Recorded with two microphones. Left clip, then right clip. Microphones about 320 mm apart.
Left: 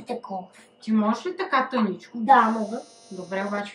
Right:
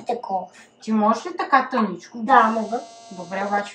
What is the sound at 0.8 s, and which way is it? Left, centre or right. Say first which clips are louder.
Speech: right 5 dB; centre.